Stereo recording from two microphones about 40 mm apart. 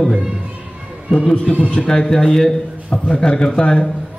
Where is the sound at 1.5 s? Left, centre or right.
Left.